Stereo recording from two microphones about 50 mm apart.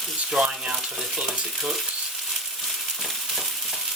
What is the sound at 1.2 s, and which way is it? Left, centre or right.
Frying, centre.